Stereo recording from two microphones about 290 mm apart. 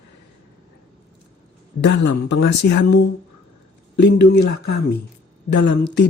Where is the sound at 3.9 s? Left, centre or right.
Left.